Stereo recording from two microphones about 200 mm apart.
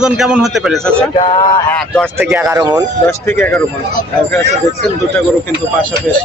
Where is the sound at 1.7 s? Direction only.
5° left (ahead or behind).